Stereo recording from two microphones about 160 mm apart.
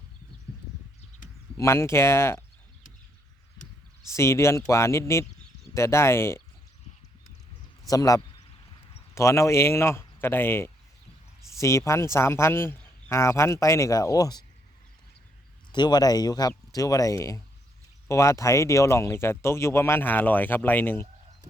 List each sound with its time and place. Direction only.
1.5 s speech: 15° left (ahead or behind)
4.1 s speech: 15° left (ahead or behind)
7.9 s speech: 20° left (ahead or behind)
15.7 s speech: 25° left (ahead or behind)